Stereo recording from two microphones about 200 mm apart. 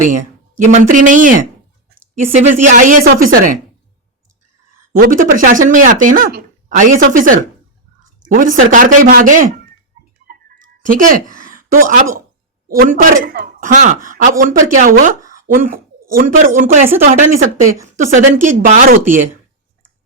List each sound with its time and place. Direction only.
0.0 s speech: 40° right (ahead or behind)
4.9 s speech: 45° right (ahead or behind)
10.2 s a sound: 40° right (ahead or behind)
12.6 s speech: 45° right (ahead or behind)